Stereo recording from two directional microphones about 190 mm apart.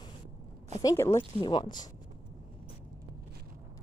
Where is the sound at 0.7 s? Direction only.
15° left (ahead or behind).